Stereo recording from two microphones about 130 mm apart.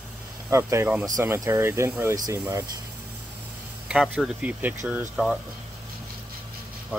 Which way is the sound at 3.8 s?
5° right (ahead or behind).